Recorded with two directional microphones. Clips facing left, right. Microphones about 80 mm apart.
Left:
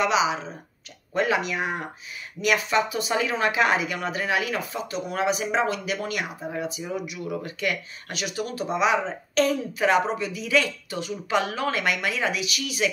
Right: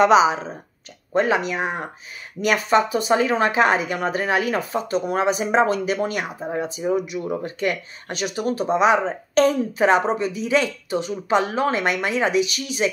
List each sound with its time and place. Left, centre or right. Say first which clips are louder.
0.0 s speech: right 8 dB; right